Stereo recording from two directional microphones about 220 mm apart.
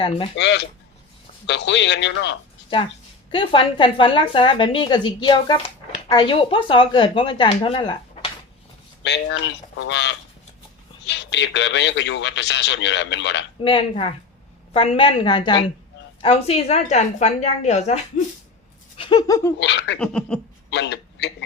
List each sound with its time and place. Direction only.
0.3 s a man's voice: 50° left (ahead or behind)
3.3 s a woman's voice: 25° left (ahead or behind)
9.0 s a man's voice: 55° left (ahead or behind)
13.6 s a woman's voice: 25° left (ahead or behind)
18.9 s a sound: 20° left (ahead or behind)
19.5 s a man's voice: 55° left (ahead or behind)
20.0 s a sound: 5° left (ahead or behind)
20.7 s a man's voice: 50° left (ahead or behind)